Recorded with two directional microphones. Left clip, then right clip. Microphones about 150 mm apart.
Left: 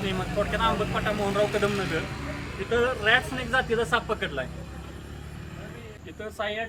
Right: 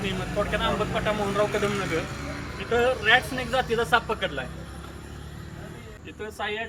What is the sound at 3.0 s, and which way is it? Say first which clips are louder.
Speech: right 2 dB; 15° left (ahead or behind).